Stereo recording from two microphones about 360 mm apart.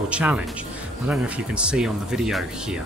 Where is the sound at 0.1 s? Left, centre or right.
Centre.